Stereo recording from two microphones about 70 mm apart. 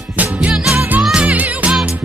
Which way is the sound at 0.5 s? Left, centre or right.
Centre.